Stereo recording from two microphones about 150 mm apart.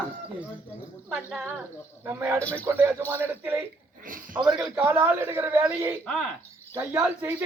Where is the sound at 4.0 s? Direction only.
65° right (ahead or behind).